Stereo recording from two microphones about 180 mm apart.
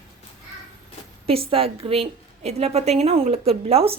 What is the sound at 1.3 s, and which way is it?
A woman's voice, 30° right (ahead or behind).